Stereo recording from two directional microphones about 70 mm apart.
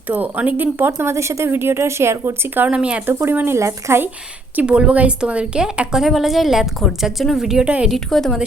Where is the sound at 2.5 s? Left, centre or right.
Centre.